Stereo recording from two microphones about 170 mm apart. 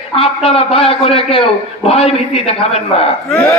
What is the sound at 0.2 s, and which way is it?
Speech, 35° left (ahead or behind).